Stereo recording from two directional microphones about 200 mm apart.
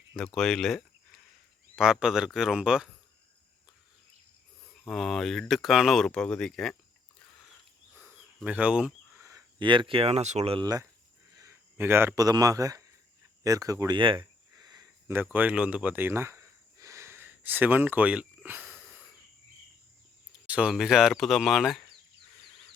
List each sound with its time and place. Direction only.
0.3 s speech: centre (ahead or behind)
4.9 s speech: centre (ahead or behind)
7.9 s a sound: 5° right (ahead or behind)
9.2 s speech: 20° right (ahead or behind)
13.4 s a sound: 15° right (ahead or behind)
20.5 s speech: 5° right (ahead or behind)